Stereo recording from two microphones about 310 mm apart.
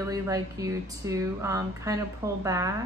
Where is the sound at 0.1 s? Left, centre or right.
Centre.